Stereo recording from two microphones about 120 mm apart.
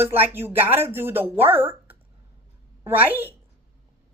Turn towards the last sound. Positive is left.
turn(degrees=-15)  # may be behind; listen again after turning